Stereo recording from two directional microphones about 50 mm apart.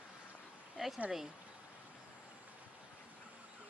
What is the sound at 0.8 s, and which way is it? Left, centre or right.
Speech, centre.